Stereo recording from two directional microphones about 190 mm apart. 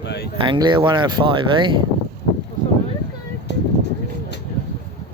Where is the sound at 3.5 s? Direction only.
65° left (ahead or behind).